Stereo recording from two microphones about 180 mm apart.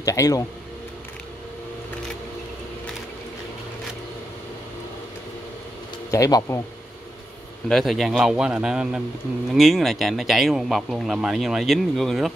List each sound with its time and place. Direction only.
0.0 s speech: 20° left (ahead or behind)
6.1 s speech: 20° left (ahead or behind)
7.6 s speech: centre (ahead or behind)